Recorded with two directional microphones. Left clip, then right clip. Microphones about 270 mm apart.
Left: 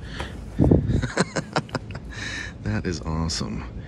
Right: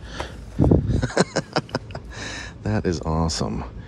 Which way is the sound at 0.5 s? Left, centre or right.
Left.